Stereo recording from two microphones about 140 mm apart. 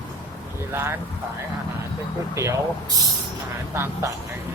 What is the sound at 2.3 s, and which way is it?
Speech, 20° right (ahead or behind).